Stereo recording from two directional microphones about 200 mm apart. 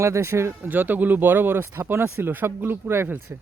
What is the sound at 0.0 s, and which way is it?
Speech, 15° right (ahead or behind).